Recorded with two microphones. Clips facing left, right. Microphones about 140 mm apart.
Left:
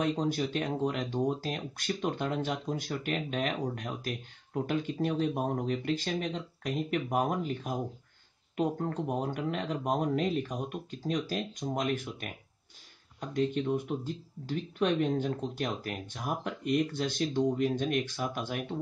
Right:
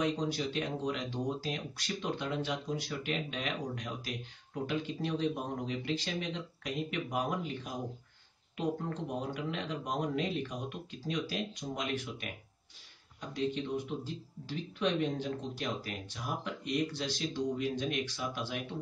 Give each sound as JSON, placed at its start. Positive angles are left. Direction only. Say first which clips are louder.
{"t": 0.0, "sound": "speech", "louder": "left 3 dB", "side_deg": 50}
{"t": 13.3, "sound": "speech", "louder": "left 5 dB", "side_deg": 50}